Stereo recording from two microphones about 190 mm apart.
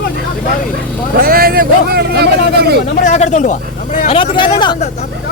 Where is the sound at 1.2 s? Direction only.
55° right (ahead or behind).